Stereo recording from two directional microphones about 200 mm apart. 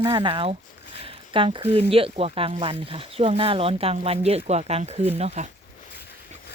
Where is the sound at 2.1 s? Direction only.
30° right (ahead or behind).